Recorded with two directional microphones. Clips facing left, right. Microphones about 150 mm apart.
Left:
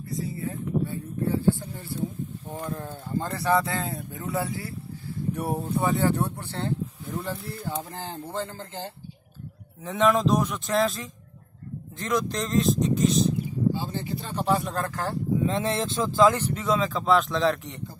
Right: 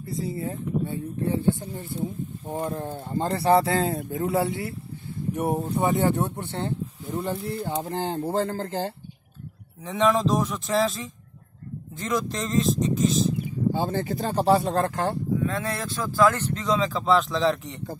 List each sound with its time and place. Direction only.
0.1 s speech: 25° right (ahead or behind)
1.5 s speech: 15° right (ahead or behind)
2.5 s speech: 35° right (ahead or behind)
4.3 s speech: 25° right (ahead or behind)
7.2 s speech: 30° right (ahead or behind)
9.8 s speech: centre (ahead or behind)
13.7 s speech: 50° right (ahead or behind); by 15.1 s 25° right (ahead or behind)
15.4 s speech: 25° left (ahead or behind); by 17.8 s centre (ahead or behind)